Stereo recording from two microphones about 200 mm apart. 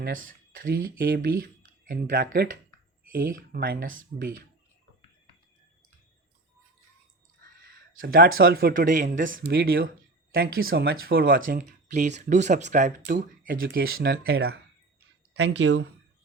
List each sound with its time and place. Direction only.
0.6 s speech: 50° right (ahead or behind)
8.0 s speech: 50° right (ahead or behind); by 15.9 s 65° right (ahead or behind)